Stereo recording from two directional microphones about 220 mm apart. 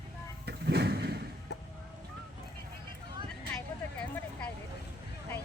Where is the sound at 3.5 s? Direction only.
5° left (ahead or behind).